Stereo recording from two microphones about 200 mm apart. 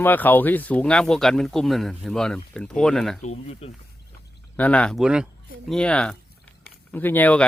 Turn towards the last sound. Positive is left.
turn(degrees=10)  # may be behind; listen again after turning